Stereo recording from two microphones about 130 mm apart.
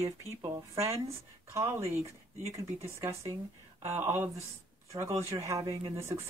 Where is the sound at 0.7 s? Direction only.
20° right (ahead or behind).